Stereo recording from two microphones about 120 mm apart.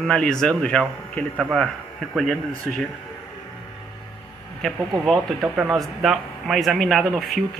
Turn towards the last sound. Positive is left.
turn(degrees=0)  # may be behind; listen again after turning